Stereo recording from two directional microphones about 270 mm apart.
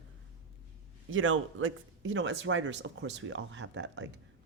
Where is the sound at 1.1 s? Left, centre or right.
Right.